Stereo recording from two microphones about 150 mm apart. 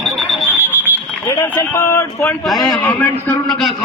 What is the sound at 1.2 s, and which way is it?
Speech, 15° left (ahead or behind).